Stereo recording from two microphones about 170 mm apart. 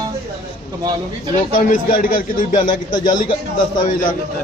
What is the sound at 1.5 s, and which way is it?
A man's voice, 50° left (ahead or behind).